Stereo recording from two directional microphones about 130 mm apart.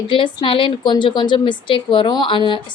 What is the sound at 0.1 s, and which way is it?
A woman's voice, 40° left (ahead or behind).